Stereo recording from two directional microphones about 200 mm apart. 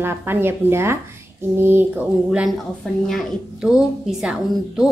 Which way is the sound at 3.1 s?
Centre (ahead or behind).